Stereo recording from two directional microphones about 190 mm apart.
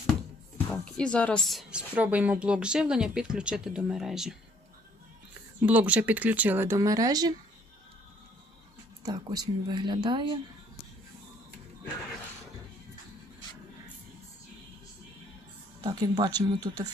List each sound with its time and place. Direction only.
0.9 s speech: 5° left (ahead or behind)
5.5 s speech: 10° right (ahead or behind)
9.0 s speech: 20° right (ahead or behind)
15.8 s speech: 20° right (ahead or behind)